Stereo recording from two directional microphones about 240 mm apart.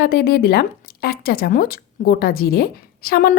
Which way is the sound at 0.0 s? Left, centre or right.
Left.